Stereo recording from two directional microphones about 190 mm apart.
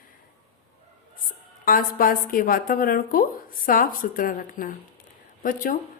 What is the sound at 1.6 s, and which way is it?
A woman's voice, 45° left (ahead or behind).